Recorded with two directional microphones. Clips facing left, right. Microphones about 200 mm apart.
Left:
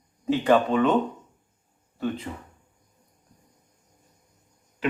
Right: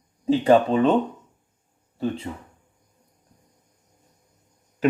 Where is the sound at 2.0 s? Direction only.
30° right (ahead or behind).